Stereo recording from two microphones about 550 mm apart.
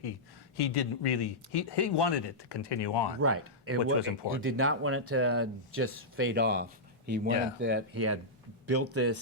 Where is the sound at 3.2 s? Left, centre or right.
Right.